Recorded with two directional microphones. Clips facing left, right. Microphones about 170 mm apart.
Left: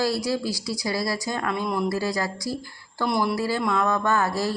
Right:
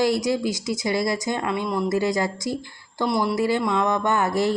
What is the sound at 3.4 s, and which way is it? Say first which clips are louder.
Speech: right 3 dB; 20° right (ahead or behind).